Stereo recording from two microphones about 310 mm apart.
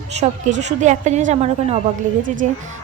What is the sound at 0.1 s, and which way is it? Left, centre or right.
Speech, right.